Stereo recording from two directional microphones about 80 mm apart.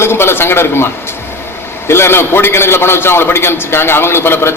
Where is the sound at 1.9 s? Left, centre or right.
Left.